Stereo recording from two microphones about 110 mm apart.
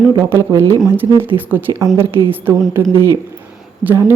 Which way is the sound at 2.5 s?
20° right (ahead or behind).